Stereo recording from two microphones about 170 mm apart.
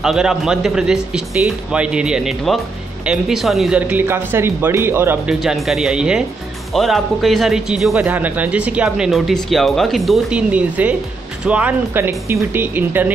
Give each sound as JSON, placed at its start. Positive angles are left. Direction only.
{"t": 0.0, "sound": "speech", "side_deg": -5}